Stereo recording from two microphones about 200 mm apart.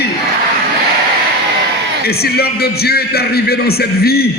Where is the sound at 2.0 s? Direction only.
50° left (ahead or behind).